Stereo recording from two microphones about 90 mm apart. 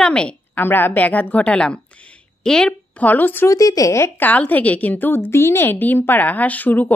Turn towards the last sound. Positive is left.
turn(degrees=20)  # may be behind; listen again after turning